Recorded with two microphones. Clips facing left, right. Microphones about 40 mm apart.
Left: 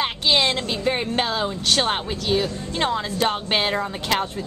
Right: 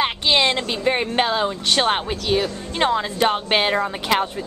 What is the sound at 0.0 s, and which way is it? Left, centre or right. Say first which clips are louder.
A woman's voice: right 2 dB; centre.